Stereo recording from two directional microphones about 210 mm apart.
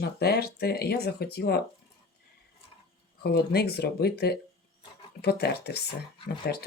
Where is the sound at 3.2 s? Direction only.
50° left (ahead or behind).